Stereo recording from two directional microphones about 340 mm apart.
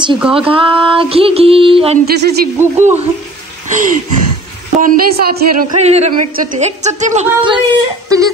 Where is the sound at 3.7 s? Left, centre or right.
Right.